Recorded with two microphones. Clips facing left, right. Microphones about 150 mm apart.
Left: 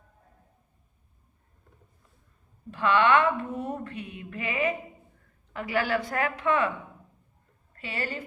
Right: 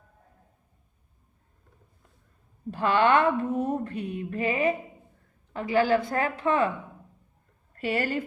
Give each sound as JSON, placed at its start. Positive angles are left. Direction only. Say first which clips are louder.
{"t": 2.6, "sound": "a woman's voice", "louder": "right 1 dB", "side_deg": -40}
{"t": 7.8, "sound": "speech", "louder": "right 7 dB", "side_deg": -45}